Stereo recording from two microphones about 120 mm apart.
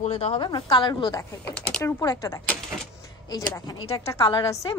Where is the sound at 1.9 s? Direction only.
25° left (ahead or behind).